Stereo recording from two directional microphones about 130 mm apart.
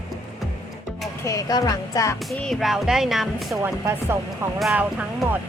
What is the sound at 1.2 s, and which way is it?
Speech, 25° left (ahead or behind).